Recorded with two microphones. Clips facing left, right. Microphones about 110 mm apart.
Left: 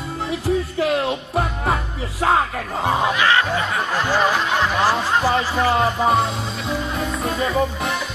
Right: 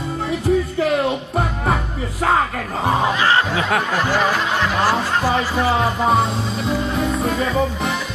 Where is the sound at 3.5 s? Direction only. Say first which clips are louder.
Right 3 dB; 90° right.